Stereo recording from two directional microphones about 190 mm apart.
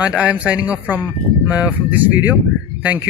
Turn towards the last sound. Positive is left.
turn(degrees=-10)  # may be behind; listen again after turning